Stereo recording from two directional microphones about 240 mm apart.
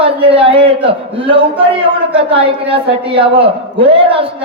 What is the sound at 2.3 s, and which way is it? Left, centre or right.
A man's voice, right.